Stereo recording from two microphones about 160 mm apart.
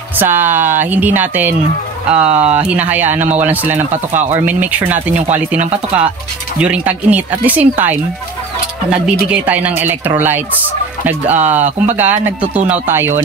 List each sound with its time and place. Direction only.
0.2 s speech: 10° right (ahead or behind)
3.7 s speech: 45° right (ahead or behind)
4.5 s speech: 10° right (ahead or behind)
6.6 s speech: 10° right (ahead or behind)
9.2 s speech: 10° right (ahead or behind)